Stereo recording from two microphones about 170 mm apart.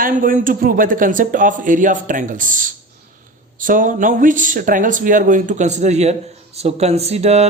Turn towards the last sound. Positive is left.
turn(degrees=-40)  # may be behind; listen again after turning